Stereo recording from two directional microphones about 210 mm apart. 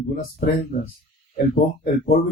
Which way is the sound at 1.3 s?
40° left (ahead or behind).